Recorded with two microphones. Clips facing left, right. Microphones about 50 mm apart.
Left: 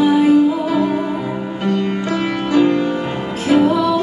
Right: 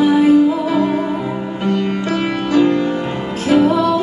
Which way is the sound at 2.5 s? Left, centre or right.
Centre.